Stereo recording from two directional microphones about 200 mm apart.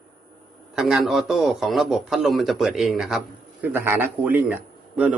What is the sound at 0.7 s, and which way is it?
A man's voice, centre (ahead or behind).